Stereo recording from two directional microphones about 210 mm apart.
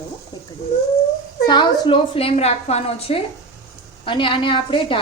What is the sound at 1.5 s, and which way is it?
A woman's voice, 20° left (ahead or behind).